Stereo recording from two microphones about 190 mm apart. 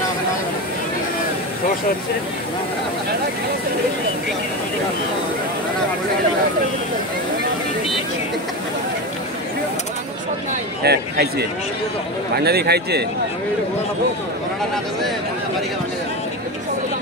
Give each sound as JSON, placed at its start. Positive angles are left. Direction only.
{"t": 10.8, "sound": "a man's voice", "side_deg": -60}
{"t": 12.4, "sound": "a man's voice", "side_deg": -60}